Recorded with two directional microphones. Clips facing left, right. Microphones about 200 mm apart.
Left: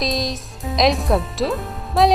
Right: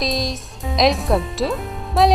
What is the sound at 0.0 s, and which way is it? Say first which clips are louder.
Music: even; centre (ahead or behind).